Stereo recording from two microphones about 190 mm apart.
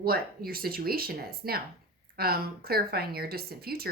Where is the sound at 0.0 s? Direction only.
50° right (ahead or behind).